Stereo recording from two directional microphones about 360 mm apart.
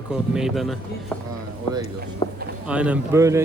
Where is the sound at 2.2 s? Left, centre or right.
Centre.